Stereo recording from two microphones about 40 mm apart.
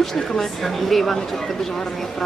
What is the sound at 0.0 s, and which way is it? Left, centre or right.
Speech, centre.